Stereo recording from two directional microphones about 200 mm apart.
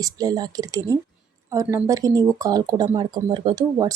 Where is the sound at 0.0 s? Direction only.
20° right (ahead or behind).